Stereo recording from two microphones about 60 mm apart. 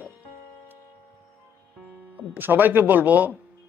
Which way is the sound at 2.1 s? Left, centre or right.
Right.